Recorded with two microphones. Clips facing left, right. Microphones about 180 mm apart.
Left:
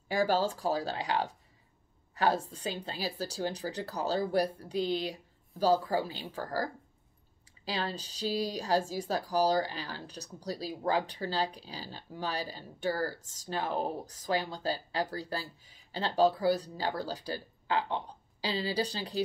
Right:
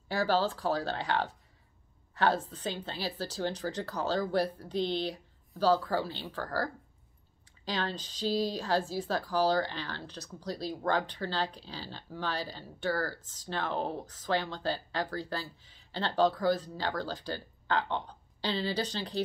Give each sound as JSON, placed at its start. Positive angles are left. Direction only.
{"t": 0.1, "sound": "speech", "side_deg": 15}
{"t": 1.0, "sound": "a woman's voice", "side_deg": 40}
{"t": 2.1, "sound": "speech", "side_deg": 10}
{"t": 17.8, "sound": "a woman's voice", "side_deg": 35}
{"t": 18.4, "sound": "speech", "side_deg": 10}